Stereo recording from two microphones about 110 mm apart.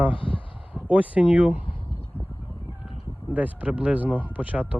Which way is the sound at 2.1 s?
20° left (ahead or behind).